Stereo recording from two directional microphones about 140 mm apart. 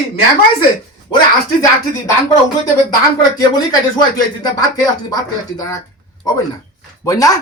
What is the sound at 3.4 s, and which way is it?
Speech, 25° left (ahead or behind).